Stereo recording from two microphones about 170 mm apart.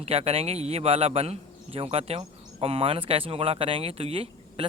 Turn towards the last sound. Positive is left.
turn(degrees=-35)  # may be behind; listen again after turning